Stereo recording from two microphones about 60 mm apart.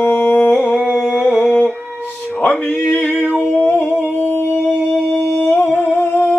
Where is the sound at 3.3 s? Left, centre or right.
Left.